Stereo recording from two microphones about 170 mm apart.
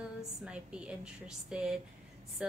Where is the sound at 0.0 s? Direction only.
5° right (ahead or behind).